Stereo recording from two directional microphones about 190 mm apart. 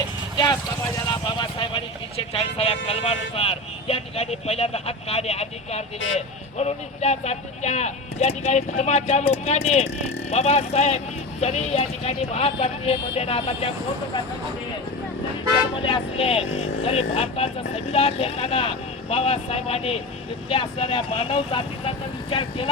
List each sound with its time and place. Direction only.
1.1 s vehicle: 25° left (ahead or behind)
2.3 s speech: 30° left (ahead or behind)
15.9 s speech: 30° left (ahead or behind)